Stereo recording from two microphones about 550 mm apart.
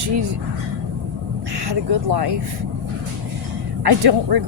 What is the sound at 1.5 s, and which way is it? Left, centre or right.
Speech, right.